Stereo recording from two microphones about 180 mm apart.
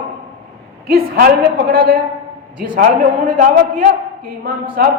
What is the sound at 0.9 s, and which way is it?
A man's voice, 55° right (ahead or behind).